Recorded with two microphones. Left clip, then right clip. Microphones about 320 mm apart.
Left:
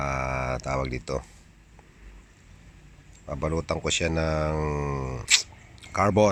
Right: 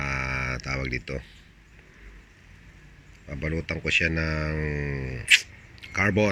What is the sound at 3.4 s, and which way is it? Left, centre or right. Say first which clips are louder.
Speech: left 2 dB; centre.